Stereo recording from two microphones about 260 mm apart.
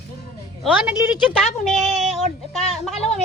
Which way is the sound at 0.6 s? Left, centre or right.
Centre.